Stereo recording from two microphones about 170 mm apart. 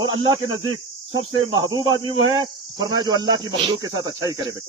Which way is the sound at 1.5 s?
25° right (ahead or behind).